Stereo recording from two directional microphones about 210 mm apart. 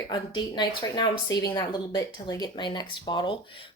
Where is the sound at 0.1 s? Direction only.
20° left (ahead or behind).